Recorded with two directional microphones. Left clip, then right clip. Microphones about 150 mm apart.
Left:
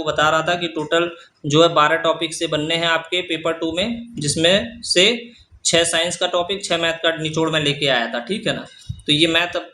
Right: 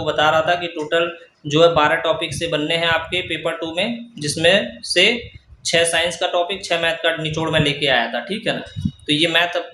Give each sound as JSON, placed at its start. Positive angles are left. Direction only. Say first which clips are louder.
{"t": 0.0, "sound": "speech", "louder": "right 1 dB", "side_deg": 25}